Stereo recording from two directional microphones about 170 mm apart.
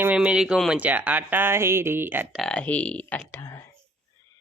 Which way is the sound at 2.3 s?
5° left (ahead or behind).